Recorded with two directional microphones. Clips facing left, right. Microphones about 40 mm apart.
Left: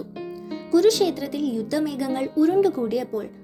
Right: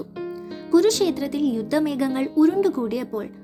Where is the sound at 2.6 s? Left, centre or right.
Centre.